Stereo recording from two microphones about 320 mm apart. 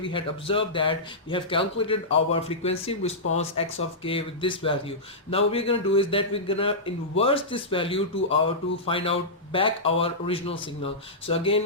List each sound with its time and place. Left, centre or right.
0.0 s speech: centre